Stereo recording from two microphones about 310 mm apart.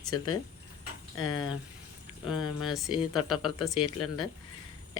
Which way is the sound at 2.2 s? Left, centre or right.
Centre.